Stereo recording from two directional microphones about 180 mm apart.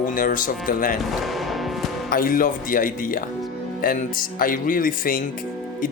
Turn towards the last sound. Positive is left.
turn(degrees=50)  # may be behind; listen again after turning